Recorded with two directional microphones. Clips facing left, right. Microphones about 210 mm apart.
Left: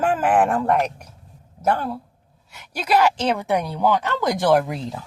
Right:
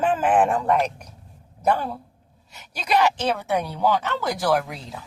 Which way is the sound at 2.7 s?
10° left (ahead or behind).